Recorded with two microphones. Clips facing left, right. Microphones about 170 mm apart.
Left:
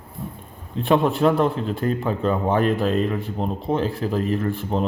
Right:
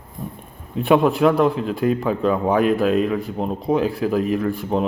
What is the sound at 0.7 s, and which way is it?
Speech, 10° right (ahead or behind).